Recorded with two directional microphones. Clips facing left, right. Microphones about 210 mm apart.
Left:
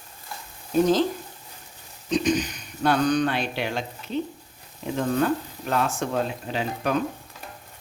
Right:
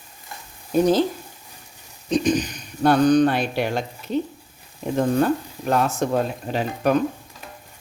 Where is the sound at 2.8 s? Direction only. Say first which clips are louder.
Right 6 dB; 40° right (ahead or behind).